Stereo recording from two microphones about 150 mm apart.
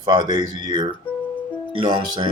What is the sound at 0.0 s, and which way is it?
Speech, 30° right (ahead or behind).